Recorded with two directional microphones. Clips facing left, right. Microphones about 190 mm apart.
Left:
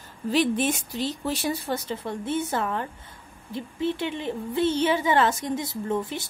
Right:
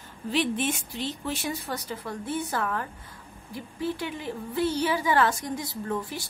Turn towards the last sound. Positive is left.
turn(degrees=20)  # may be behind; listen again after turning